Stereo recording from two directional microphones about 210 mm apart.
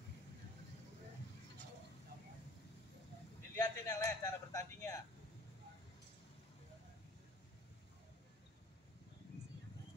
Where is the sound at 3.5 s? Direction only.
15° left (ahead or behind).